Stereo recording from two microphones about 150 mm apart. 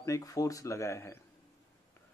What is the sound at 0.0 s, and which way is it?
Speech, 20° left (ahead or behind).